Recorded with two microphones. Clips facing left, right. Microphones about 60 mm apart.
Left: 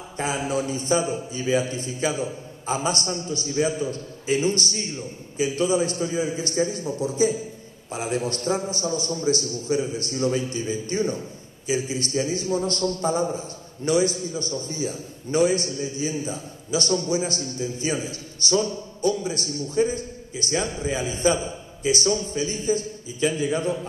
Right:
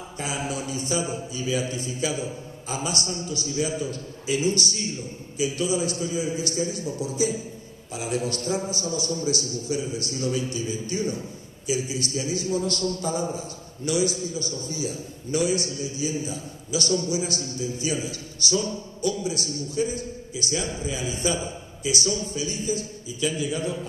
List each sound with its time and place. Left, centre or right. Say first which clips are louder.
0.2 s a man's voice: left 5 dB; left